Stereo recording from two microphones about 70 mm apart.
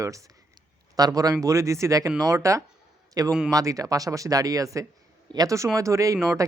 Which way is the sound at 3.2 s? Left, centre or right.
Right.